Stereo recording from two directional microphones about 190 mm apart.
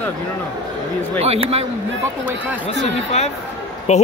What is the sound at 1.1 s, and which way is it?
Speech, 30° right (ahead or behind).